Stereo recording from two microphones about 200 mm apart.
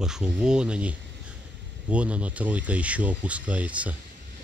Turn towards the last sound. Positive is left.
turn(degrees=-5)  # may be behind; listen again after turning